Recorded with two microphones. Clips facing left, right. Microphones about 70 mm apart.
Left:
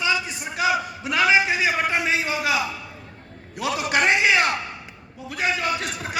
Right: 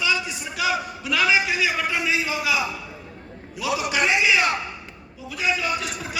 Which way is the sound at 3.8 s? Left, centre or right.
Left.